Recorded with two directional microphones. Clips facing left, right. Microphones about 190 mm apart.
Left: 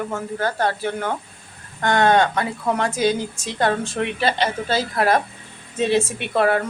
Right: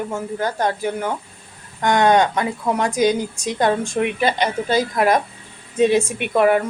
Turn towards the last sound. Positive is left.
turn(degrees=-15)  # may be behind; listen again after turning